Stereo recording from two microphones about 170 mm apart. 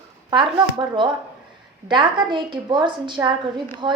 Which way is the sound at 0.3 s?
30° right (ahead or behind).